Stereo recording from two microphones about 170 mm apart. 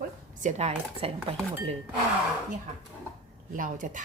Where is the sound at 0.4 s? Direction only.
40° right (ahead or behind).